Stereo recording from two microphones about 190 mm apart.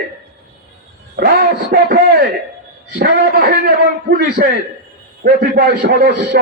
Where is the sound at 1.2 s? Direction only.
55° right (ahead or behind).